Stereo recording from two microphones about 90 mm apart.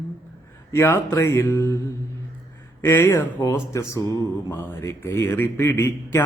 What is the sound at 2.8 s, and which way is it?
Speech, 25° left (ahead or behind).